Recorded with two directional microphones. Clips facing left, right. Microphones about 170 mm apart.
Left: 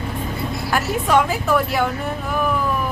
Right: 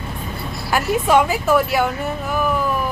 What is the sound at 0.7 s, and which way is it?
Speech, 5° right (ahead or behind).